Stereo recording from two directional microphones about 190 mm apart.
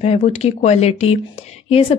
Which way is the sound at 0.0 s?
35° left (ahead or behind).